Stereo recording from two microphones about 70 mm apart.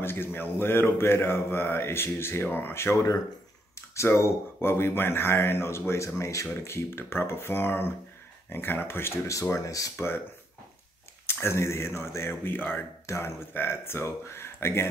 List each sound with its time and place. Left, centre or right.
0.0 s speech: left
9.3 s speech: left
9.9 s speech: left
11.2 s speech: left
13.0 s speech: left